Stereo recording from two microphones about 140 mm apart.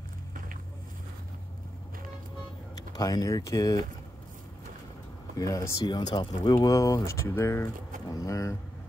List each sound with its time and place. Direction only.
3.0 s speech: 25° left (ahead or behind)
5.4 s speech: 25° left (ahead or behind)